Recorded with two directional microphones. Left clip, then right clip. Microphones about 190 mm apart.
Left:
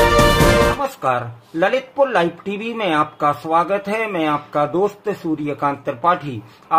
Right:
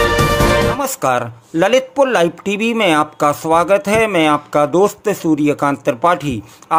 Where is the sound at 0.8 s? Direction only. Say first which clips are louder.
Right 3 dB; 55° right (ahead or behind).